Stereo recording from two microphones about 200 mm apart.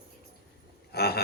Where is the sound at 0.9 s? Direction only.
50° left (ahead or behind).